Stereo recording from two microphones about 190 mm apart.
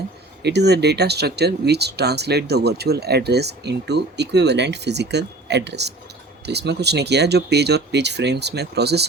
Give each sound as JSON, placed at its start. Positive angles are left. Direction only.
{"t": 0.4, "sound": "speech", "side_deg": -60}